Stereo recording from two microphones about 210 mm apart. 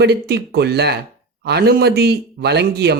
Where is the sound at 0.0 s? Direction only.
50° right (ahead or behind).